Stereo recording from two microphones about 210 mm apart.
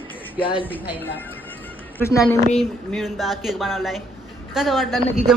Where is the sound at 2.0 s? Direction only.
10° left (ahead or behind).